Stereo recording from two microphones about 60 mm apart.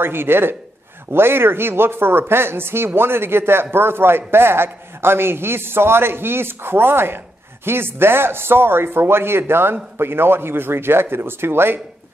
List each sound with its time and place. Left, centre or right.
0.0 s a man's voice: right